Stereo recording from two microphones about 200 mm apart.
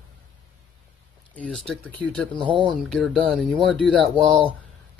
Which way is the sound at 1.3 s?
5° left (ahead or behind).